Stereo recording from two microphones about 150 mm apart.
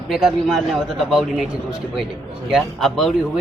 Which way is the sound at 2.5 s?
Centre (ahead or behind).